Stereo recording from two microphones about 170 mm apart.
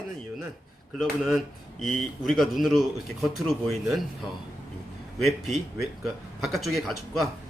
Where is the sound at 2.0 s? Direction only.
Centre (ahead or behind).